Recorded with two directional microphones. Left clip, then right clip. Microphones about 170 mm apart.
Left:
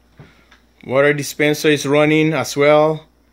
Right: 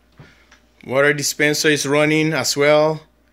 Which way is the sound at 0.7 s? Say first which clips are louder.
Left 2 dB; 10° left (ahead or behind).